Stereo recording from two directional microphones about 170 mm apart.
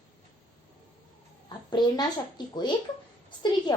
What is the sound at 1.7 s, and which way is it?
A woman's voice, 25° left (ahead or behind).